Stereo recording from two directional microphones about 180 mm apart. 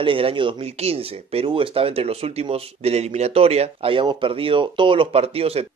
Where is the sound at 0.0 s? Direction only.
30° right (ahead or behind).